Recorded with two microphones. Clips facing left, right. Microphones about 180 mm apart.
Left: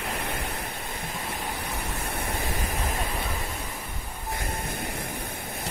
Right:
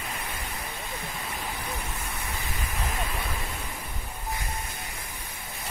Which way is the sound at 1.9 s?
60° left (ahead or behind).